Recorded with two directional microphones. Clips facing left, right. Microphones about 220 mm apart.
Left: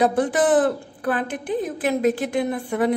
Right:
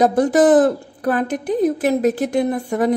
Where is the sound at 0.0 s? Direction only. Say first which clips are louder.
Right 5 dB; 40° right (ahead or behind).